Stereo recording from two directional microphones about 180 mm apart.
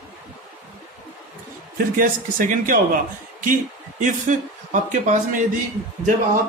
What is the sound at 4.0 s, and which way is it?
Speech, 45° right (ahead or behind).